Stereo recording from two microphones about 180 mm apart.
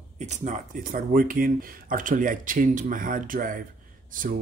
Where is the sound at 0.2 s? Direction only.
40° right (ahead or behind).